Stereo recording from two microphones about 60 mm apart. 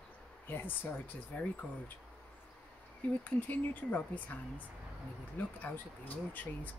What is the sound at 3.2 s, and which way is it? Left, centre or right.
Speech, left.